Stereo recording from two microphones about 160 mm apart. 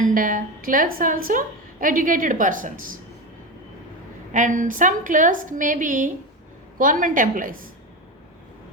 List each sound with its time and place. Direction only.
0.0 s a woman's voice: 55° right (ahead or behind)
4.3 s a woman's voice: 50° right (ahead or behind)